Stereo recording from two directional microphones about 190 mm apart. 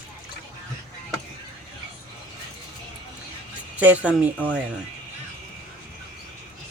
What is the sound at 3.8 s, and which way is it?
Speech, 5° right (ahead or behind).